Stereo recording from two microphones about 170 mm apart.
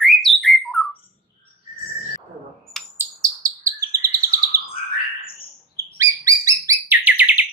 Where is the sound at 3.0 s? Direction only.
20° right (ahead or behind).